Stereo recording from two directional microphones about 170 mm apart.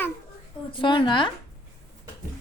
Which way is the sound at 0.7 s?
30° left (ahead or behind).